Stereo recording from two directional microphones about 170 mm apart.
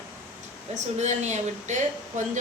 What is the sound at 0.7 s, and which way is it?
Speech, 40° right (ahead or behind).